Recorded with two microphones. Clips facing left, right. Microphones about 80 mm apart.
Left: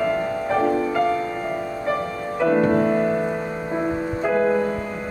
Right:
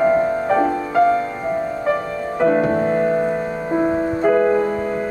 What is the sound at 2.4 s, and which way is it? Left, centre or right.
Music, right.